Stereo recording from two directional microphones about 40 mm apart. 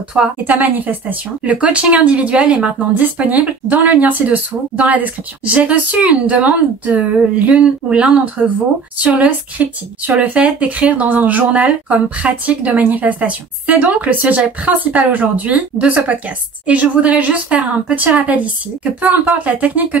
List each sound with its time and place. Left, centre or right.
0.2 s a woman's voice: centre
0.5 s speech: right
9.0 s speech: right
10.9 s speech: right
18.9 s speech: right
19.2 s speech: right